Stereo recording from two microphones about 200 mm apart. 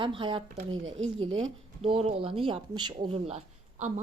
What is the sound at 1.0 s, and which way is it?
Speech, 30° right (ahead or behind).